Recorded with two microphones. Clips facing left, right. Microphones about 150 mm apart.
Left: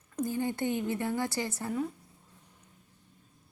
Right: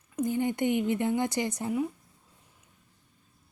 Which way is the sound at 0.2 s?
20° right (ahead or behind).